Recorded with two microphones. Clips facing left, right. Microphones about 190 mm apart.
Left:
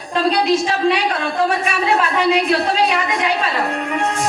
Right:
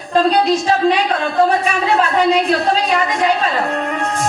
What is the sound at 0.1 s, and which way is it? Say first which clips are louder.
Speech: right 2 dB; 35° right (ahead or behind).